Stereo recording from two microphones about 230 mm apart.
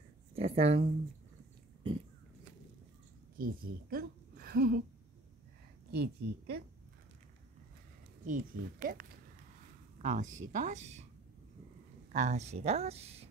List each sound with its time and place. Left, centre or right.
0.4 s speech: right
3.3 s a woman's voice: right
5.9 s a woman's voice: right
8.3 s speech: right
12.1 s speech: right